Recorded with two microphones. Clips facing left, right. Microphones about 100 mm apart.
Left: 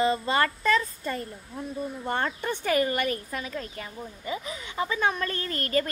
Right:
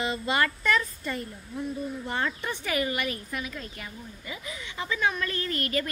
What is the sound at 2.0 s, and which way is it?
A woman's voice, 45° left (ahead or behind).